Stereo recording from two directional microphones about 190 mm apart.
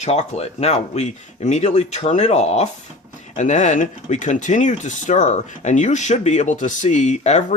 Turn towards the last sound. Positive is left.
turn(degrees=35)  # may be behind; listen again after turning